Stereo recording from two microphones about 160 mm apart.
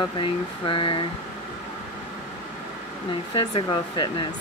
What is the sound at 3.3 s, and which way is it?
Speech, 30° left (ahead or behind).